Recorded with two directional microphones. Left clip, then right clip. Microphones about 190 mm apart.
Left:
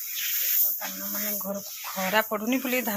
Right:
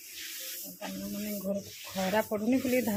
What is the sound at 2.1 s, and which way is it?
Speech, 5° right (ahead or behind).